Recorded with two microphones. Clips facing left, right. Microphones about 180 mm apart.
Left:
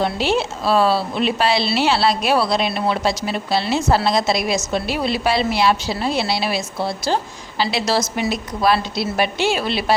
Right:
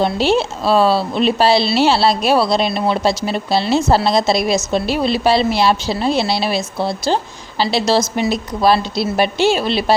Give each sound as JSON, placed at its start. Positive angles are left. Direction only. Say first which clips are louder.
{"t": 0.0, "sound": "a woman's voice", "louder": "right 4 dB", "side_deg": -30}